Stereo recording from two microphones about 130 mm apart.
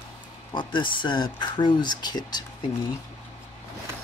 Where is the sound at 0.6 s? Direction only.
35° left (ahead or behind).